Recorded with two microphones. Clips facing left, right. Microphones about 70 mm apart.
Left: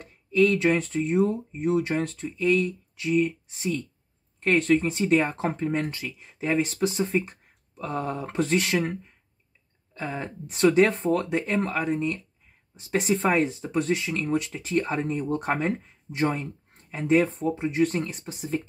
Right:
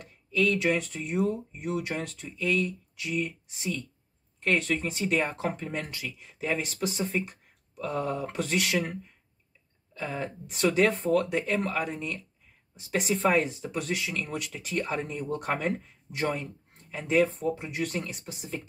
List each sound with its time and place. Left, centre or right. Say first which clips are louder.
0.0 s speech: left 5 dB; left
9.9 s speech: left 1 dB; left
12.8 s speech: left 3 dB; left
13.1 s speech: left 2 dB; left